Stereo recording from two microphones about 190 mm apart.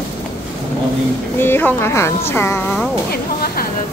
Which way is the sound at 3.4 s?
50° left (ahead or behind).